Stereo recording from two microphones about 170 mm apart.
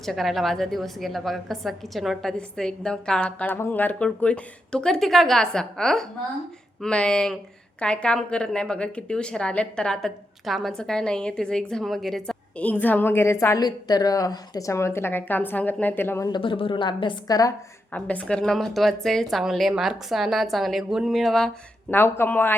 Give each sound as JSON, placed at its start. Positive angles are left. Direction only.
{"t": 0.0, "sound": "a woman's voice", "side_deg": 0}
{"t": 16.3, "sound": "a woman's voice", "side_deg": 30}
{"t": 17.9, "sound": "a woman's voice", "side_deg": 10}